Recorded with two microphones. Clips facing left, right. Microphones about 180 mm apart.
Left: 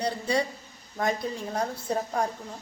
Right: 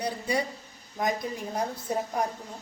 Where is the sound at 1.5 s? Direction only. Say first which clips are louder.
Left 1 dB; 10° right (ahead or behind).